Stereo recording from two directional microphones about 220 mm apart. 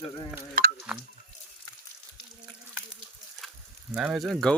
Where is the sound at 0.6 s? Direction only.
40° right (ahead or behind).